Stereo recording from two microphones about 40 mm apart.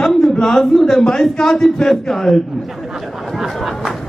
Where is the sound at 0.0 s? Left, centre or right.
Centre.